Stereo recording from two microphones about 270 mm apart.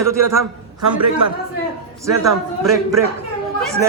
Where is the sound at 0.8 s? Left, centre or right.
Right.